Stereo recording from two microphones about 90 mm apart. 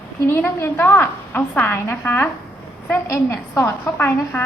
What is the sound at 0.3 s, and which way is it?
A woman's voice, 25° left (ahead or behind).